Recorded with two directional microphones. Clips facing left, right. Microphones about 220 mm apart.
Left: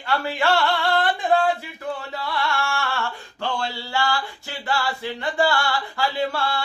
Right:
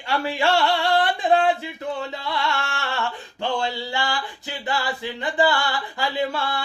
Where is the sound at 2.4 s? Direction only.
20° right (ahead or behind).